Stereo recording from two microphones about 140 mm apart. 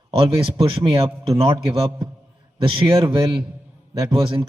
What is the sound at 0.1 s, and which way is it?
A man's voice, 40° right (ahead or behind).